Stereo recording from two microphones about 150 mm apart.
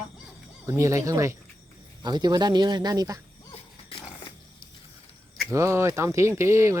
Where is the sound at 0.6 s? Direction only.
20° right (ahead or behind).